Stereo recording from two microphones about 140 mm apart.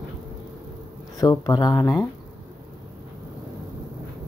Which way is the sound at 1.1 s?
25° left (ahead or behind).